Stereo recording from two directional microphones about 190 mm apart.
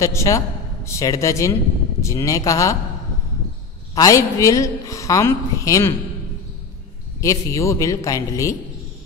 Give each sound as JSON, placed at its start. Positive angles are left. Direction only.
{"t": 0.0, "sound": "a woman's voice", "side_deg": 15}
{"t": 3.9, "sound": "a woman's voice", "side_deg": 15}
{"t": 7.2, "sound": "a woman's voice", "side_deg": 15}